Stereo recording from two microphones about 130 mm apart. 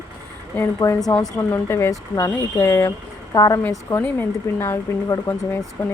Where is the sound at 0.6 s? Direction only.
20° left (ahead or behind).